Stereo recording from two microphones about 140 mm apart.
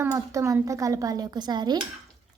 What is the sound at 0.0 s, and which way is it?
A woman's voice, 20° right (ahead or behind).